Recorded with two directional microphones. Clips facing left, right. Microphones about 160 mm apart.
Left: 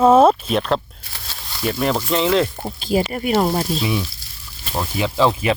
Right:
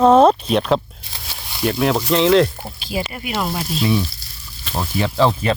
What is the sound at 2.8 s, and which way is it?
Speech, 45° left (ahead or behind).